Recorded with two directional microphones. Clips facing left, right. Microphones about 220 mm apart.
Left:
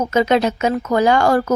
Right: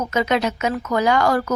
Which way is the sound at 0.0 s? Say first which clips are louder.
Left 5 dB; 30° left (ahead or behind).